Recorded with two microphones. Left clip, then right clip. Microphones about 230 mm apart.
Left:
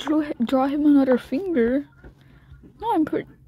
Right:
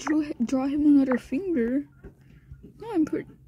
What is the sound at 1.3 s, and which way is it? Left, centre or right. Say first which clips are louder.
Speech: left 3 dB; left.